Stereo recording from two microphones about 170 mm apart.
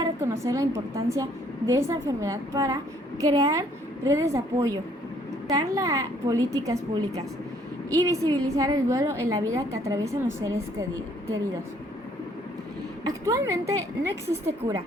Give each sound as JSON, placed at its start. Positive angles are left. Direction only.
{"t": 0.0, "sound": "a woman's voice", "side_deg": -20}
{"t": 13.1, "sound": "a woman's voice", "side_deg": -20}